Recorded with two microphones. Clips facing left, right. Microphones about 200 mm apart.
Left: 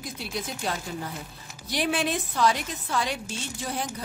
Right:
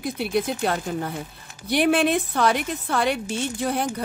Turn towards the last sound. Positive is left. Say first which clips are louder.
# right 8 dB
turn(degrees=-60)  # may be behind; listen again after turning